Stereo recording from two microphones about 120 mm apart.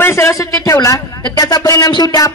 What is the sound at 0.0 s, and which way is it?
A woman's voice, 25° left (ahead or behind).